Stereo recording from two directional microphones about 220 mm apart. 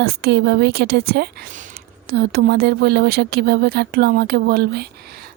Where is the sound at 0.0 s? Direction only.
45° right (ahead or behind).